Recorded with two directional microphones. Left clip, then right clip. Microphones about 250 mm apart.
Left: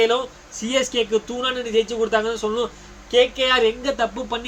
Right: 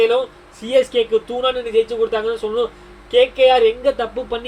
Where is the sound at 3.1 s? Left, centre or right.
Centre.